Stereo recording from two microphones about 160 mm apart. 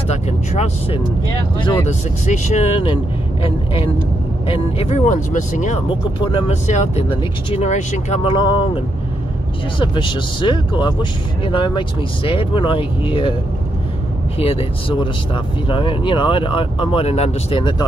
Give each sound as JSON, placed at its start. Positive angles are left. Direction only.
{"t": 0.1, "sound": "speech", "side_deg": 45}
{"t": 2.2, "sound": "speech", "side_deg": 50}
{"t": 5.9, "sound": "speech", "side_deg": 35}
{"t": 6.7, "sound": "speech", "side_deg": 45}
{"t": 9.8, "sound": "speech", "side_deg": 30}
{"t": 14.4, "sound": "speech", "side_deg": 35}